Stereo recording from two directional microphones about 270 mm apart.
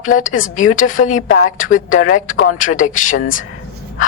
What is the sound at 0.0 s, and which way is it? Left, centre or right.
Speech, left.